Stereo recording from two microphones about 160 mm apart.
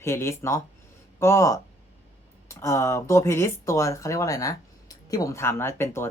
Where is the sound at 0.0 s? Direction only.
15° left (ahead or behind).